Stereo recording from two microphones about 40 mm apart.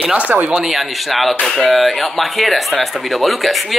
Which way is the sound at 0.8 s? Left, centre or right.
Centre.